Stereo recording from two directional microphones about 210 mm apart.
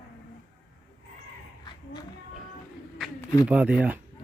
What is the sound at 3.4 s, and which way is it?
Speech, 5° right (ahead or behind).